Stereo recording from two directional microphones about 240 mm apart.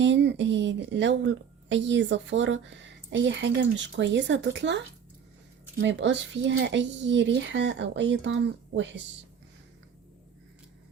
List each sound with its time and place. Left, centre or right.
0.0 s a woman's voice: right